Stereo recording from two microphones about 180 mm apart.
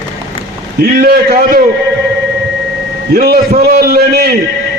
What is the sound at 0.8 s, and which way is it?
Speech, 55° right (ahead or behind).